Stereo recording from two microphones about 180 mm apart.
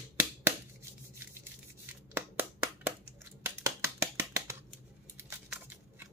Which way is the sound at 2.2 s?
10° right (ahead or behind).